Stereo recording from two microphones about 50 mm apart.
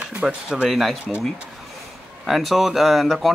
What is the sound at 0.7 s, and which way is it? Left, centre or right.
Speech, centre.